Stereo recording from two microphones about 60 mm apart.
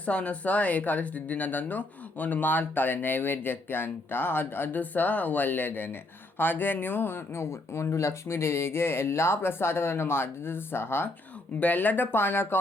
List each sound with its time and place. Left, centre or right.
0.0 s speech: left
11.6 s speech: left